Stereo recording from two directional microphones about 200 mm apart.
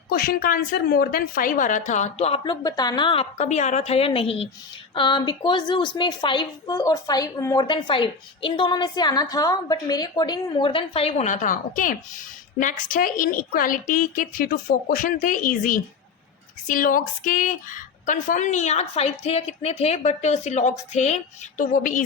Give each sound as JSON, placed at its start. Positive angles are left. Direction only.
{"t": 0.1, "sound": "a woman's voice", "side_deg": 50}